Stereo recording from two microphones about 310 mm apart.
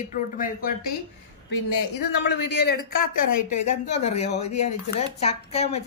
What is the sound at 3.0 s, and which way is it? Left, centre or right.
Speech, left.